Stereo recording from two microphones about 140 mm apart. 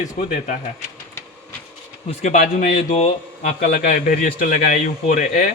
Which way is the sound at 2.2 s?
60° left (ahead or behind).